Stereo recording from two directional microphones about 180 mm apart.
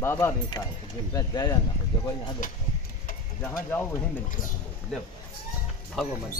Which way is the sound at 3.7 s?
10° left (ahead or behind).